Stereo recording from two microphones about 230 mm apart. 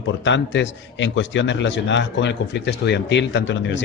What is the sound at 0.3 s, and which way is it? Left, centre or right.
A man's voice, left.